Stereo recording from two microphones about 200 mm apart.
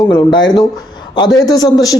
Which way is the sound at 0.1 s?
20° left (ahead or behind).